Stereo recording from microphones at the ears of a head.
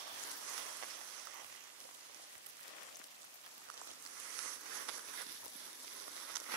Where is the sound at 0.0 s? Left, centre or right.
Right.